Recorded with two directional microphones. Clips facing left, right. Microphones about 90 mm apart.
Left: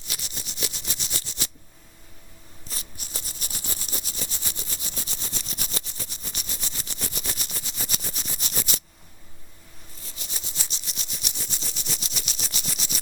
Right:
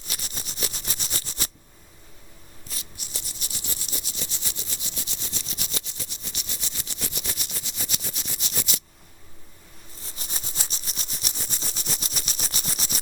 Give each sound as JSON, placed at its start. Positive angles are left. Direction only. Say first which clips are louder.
{"t": 0.1, "sound": "rub", "louder": "right 1 dB", "side_deg": -45}
{"t": 2.6, "sound": "rub", "louder": "left 1 dB", "side_deg": 40}
{"t": 7.2, "sound": "a sound", "louder": "left 1 dB", "side_deg": 40}
{"t": 10.2, "sound": "rub", "louder": "right 2 dB", "side_deg": -40}